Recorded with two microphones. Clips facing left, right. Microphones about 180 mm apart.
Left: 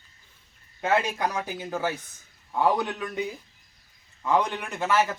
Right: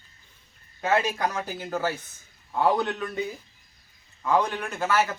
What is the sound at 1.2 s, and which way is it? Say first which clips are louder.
Speech: even; 15° left (ahead or behind).